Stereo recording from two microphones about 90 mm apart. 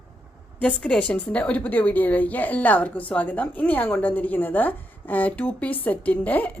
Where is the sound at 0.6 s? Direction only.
10° left (ahead or behind).